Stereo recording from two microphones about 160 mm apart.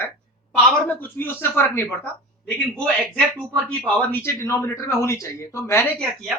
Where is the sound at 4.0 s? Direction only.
15° left (ahead or behind).